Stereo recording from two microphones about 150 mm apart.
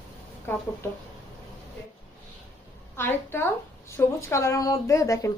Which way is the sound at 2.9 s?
15° left (ahead or behind).